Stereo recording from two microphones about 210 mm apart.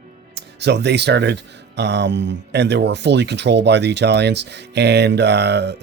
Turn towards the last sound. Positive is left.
turn(degrees=-55)  # may be behind; listen again after turning